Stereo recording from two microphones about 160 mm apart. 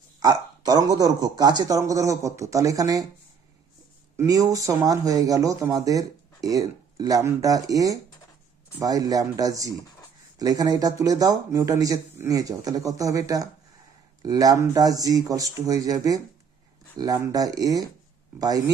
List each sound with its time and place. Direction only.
0.2 s speech: 25° right (ahead or behind)
4.2 s speech: 20° right (ahead or behind)